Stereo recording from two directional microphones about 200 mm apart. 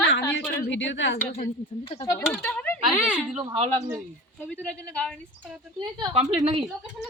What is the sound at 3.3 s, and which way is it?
Speech, 30° right (ahead or behind).